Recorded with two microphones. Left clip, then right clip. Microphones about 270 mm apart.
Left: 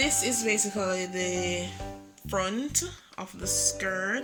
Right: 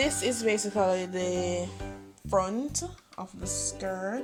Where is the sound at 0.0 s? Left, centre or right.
Right.